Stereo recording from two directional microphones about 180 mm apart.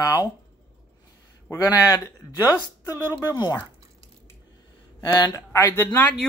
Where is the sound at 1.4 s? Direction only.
15° left (ahead or behind).